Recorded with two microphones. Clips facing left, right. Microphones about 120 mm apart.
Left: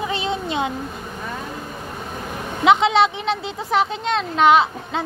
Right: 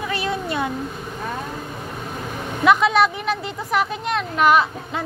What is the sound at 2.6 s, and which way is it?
Speech, 25° left (ahead or behind).